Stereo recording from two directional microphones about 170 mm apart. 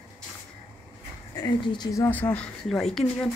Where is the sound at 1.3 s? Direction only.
25° left (ahead or behind); by 3.3 s centre (ahead or behind).